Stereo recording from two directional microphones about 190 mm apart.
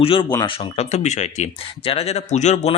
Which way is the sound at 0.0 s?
30° left (ahead or behind).